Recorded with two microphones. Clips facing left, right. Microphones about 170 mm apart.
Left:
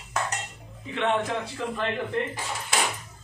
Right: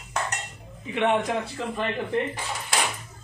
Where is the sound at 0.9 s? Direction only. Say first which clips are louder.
Right 2 dB; 15° right (ahead or behind).